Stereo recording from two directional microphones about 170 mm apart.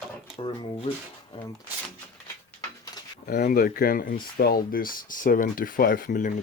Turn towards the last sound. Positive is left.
turn(degrees=55)  # may be behind; listen again after turning